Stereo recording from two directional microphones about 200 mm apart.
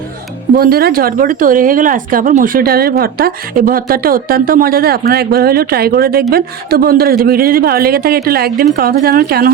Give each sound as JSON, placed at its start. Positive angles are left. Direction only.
{"t": 0.5, "sound": "speech", "side_deg": -50}